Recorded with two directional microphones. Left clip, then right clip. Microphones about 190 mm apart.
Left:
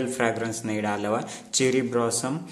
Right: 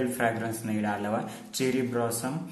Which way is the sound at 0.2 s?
35° left (ahead or behind).